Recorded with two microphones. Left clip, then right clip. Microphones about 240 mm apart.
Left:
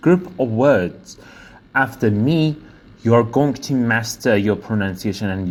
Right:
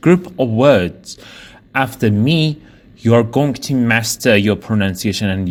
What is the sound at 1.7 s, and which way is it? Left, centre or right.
A man's voice, right.